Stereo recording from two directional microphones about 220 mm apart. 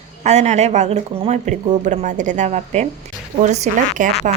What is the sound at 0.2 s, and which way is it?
Speech, 30° right (ahead or behind).